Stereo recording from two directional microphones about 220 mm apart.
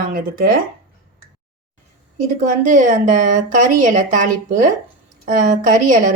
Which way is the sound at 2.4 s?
35° right (ahead or behind).